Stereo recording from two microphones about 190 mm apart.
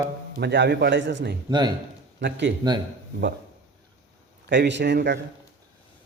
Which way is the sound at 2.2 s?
65° right (ahead or behind).